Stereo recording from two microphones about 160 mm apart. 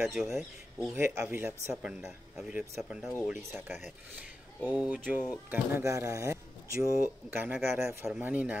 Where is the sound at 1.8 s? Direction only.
5° right (ahead or behind).